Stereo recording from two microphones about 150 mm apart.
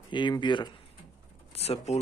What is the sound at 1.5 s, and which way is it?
Speech, 45° left (ahead or behind).